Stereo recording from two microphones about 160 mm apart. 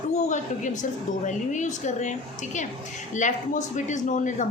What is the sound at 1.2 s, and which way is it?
A woman's voice, 50° left (ahead or behind).